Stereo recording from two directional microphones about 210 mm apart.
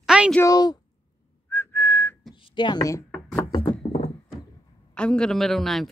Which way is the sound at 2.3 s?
25° left (ahead or behind).